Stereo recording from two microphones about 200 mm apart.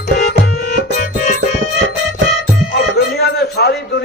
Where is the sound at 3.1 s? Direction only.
50° left (ahead or behind).